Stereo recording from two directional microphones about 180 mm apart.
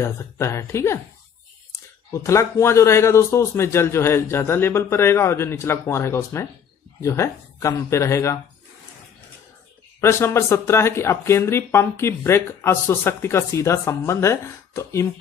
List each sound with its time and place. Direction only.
0.0 s speech: 15° left (ahead or behind)
2.2 s speech: 15° left (ahead or behind)
9.9 s speech: 15° left (ahead or behind)